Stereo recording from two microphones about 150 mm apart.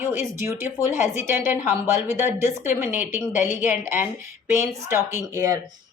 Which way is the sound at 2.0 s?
55° left (ahead or behind).